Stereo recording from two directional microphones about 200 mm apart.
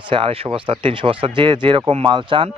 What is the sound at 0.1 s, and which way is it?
Speech, 25° right (ahead or behind).